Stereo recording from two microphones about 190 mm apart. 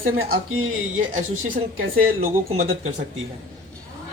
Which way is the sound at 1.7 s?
50° right (ahead or behind).